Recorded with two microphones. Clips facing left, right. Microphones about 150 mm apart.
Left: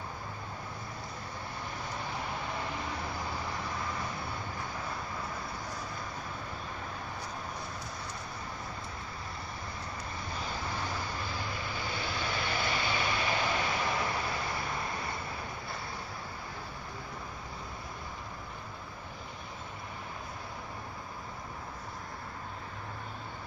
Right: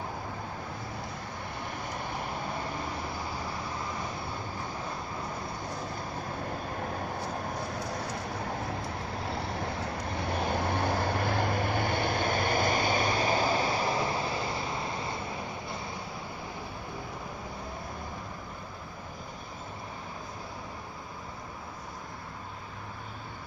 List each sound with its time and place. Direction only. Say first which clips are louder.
7.9 s vehicle: right 7 dB; 65° right (ahead or behind); by 14.5 s 25° right (ahead or behind)